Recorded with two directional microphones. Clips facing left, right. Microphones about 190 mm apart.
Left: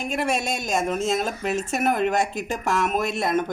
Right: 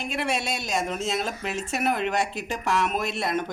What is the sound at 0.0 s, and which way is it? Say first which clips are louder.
Speech: left 3 dB; 45° left (ahead or behind).